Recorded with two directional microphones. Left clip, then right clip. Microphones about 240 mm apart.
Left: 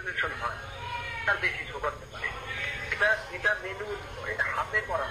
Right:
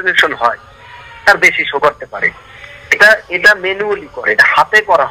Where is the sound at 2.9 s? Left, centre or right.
Right.